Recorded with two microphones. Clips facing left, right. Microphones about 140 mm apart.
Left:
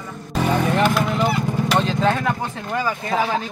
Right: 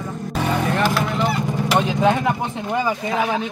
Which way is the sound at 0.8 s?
Centre (ahead or behind).